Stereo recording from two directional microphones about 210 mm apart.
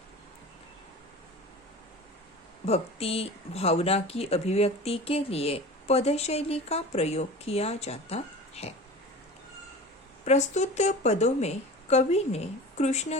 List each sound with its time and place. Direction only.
2.6 s speech: 30° left (ahead or behind)
10.2 s a woman's voice: 35° left (ahead or behind)